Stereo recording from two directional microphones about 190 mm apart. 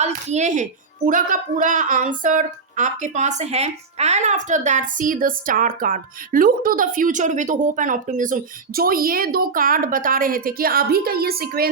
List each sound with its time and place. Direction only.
0.0 s speech: 35° right (ahead or behind); by 11.7 s 55° right (ahead or behind)